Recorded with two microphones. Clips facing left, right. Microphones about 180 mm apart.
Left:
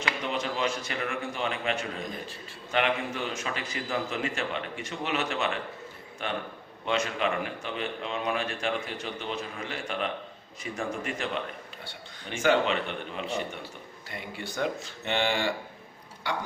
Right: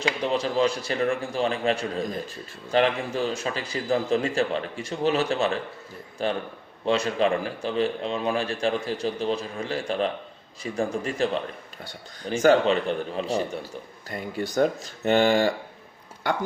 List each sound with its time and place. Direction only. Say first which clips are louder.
0.0 s speech: right 6 dB; 35° right (ahead or behind); by 16.4 s 50° right (ahead or behind)